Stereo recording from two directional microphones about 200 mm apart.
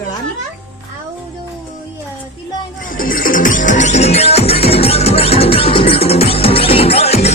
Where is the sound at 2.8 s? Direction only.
45° left (ahead or behind).